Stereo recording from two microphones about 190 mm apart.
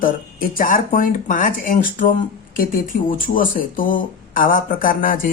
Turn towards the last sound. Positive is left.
turn(degrees=45)  # may be behind; listen again after turning